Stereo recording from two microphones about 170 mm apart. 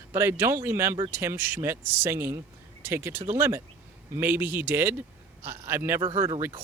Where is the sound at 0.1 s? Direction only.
15° right (ahead or behind).